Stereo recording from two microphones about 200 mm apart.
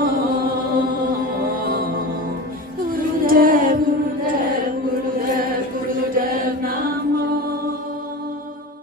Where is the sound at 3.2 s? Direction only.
45° right (ahead or behind).